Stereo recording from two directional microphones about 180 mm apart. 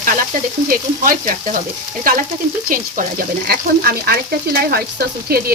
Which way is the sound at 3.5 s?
60° right (ahead or behind).